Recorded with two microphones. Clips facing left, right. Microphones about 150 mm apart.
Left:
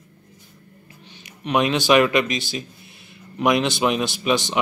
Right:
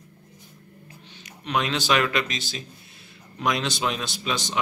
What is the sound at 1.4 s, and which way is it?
Speech, 15° left (ahead or behind).